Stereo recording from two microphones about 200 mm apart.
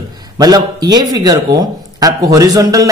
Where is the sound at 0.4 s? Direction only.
20° right (ahead or behind).